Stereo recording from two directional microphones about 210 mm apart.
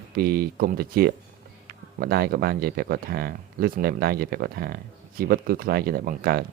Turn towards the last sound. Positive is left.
turn(degrees=-45)  # may be behind; listen again after turning